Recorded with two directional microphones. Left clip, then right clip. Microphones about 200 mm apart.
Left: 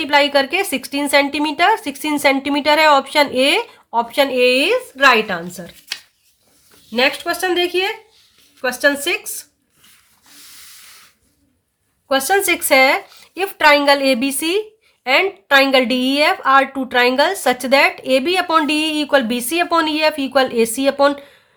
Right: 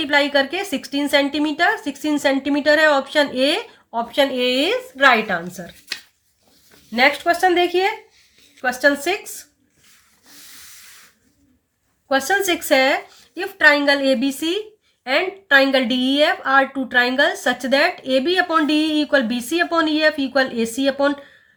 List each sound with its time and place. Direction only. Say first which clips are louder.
0.0 s speech: left 3 dB; 30° left (ahead or behind)
12.0 s speech: left 3 dB; 30° left (ahead or behind)